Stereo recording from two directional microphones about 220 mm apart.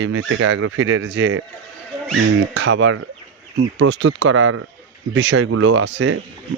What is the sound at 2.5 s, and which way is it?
Speech, 55° right (ahead or behind).